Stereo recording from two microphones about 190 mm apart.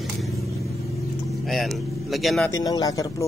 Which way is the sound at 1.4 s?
Centre (ahead or behind).